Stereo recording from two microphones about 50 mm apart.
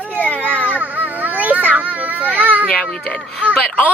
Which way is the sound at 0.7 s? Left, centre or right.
Right.